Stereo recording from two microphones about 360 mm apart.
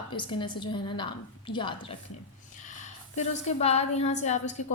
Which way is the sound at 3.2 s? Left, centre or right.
Centre.